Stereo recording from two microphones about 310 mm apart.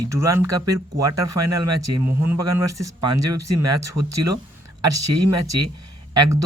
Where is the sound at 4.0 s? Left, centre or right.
Right.